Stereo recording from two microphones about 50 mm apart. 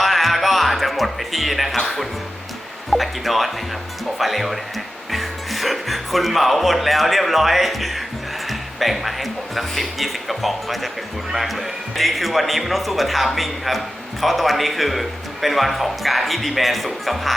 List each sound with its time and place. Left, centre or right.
0.0 s music: centre
2.9 s a man's voice: centre